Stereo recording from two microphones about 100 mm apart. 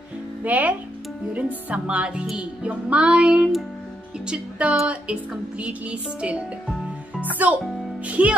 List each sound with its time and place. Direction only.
0.4 s speech: 15° right (ahead or behind)
7.5 s speech: 10° right (ahead or behind)